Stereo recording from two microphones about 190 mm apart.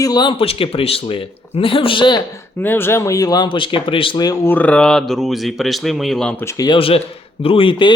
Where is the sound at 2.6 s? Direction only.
10° left (ahead or behind).